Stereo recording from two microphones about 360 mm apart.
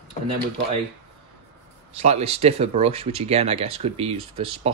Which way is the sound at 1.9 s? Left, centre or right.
Centre.